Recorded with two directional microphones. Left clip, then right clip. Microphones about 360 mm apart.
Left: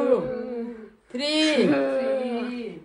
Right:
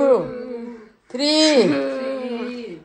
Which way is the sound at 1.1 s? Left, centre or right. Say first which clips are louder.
Right 6 dB; centre.